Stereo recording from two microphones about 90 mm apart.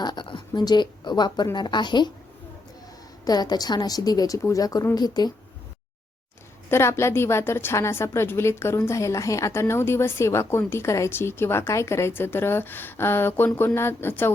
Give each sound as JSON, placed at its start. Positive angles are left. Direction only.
{"t": 0.0, "sound": "speech", "side_deg": 55}
{"t": 3.2, "sound": "a woman's voice", "side_deg": 50}
{"t": 6.7, "sound": "a woman's voice", "side_deg": 30}